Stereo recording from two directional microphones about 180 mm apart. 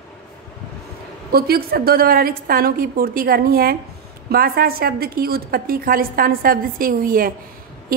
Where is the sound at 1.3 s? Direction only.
60° right (ahead or behind).